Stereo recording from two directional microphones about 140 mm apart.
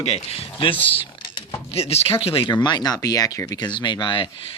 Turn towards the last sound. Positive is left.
turn(degrees=40)  # may be behind; listen again after turning